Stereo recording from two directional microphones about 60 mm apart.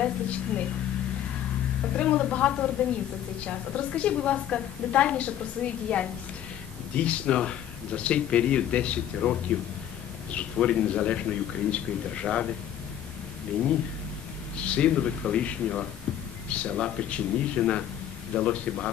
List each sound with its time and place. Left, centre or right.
0.0 s a woman's voice: left
2.0 s a woman's voice: centre
14.6 s a man's voice: centre